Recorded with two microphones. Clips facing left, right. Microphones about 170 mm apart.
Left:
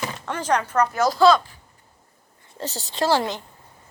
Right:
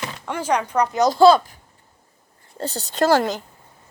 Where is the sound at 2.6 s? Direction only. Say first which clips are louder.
Right 4 dB; 45° right (ahead or behind).